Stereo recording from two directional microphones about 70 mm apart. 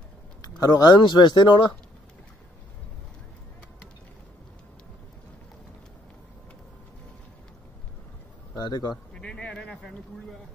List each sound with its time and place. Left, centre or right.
0.4 s speech: left
8.5 s a man's voice: left
9.1 s a sound: centre